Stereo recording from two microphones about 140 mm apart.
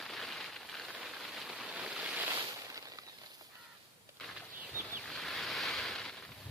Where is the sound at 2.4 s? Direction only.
25° right (ahead or behind).